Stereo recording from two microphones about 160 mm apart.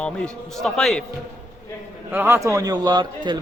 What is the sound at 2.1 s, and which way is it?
A man's voice, 15° right (ahead or behind).